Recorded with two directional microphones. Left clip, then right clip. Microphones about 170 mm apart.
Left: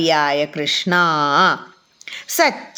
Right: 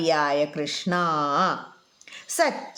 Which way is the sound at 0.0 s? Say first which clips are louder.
Left 5 dB; 10° left (ahead or behind).